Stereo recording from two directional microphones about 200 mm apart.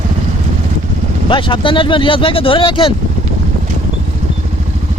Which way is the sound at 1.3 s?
25° left (ahead or behind).